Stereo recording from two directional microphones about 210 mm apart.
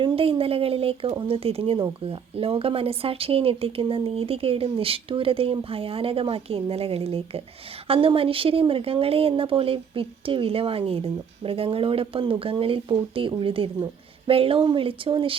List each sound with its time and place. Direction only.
0.0 s speech: 25° right (ahead or behind)